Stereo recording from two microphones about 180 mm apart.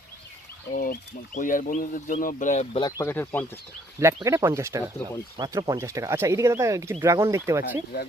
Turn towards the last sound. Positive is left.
turn(degrees=-15)  # may be behind; listen again after turning